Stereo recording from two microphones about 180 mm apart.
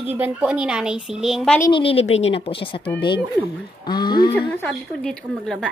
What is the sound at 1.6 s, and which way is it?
A woman's voice, 30° left (ahead or behind).